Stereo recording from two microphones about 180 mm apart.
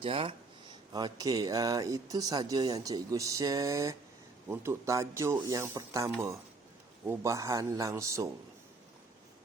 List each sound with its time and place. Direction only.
0.0 s speech: 30° right (ahead or behind)
7.1 s speech: 15° right (ahead or behind)